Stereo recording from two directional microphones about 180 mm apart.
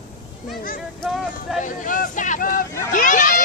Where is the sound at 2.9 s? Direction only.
45° left (ahead or behind).